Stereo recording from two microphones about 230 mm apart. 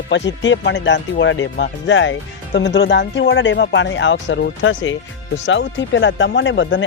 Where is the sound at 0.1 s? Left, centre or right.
Left.